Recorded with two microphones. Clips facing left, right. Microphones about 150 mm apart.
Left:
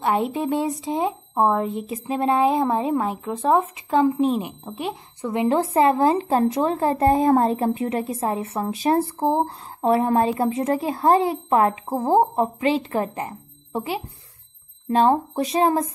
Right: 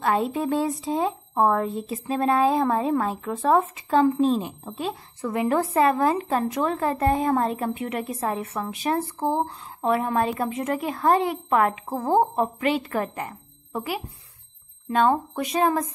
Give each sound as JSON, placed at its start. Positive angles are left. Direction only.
{"t": 0.0, "sound": "a woman's voice", "side_deg": 20}